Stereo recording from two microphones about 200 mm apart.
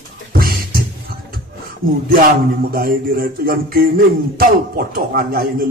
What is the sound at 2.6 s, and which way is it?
A man's voice, 45° right (ahead or behind).